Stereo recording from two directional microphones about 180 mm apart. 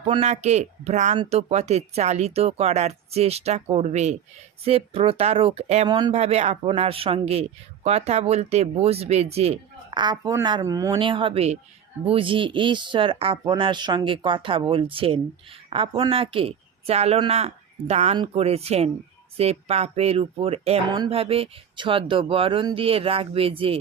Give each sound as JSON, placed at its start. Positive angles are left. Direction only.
{"t": 0.0, "sound": "speech", "side_deg": -40}
{"t": 5.9, "sound": "speech", "side_deg": -25}
{"t": 6.1, "sound": "speech", "side_deg": -35}